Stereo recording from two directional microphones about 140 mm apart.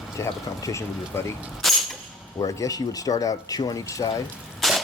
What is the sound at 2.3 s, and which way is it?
Speech, 25° left (ahead or behind).